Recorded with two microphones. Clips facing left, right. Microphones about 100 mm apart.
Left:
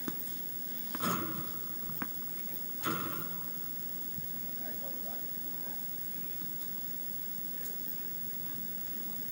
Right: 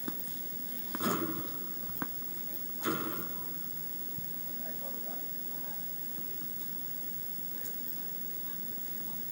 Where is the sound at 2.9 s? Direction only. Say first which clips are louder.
Right 2 dB; 5° right (ahead or behind).